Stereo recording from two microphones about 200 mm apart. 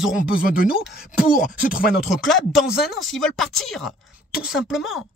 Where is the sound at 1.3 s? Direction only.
45° left (ahead or behind).